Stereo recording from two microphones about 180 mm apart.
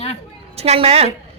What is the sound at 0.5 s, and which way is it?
Speech, 35° right (ahead or behind).